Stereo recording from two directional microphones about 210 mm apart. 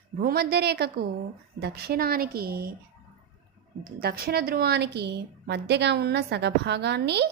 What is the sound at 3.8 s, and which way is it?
A woman's voice, 45° right (ahead or behind).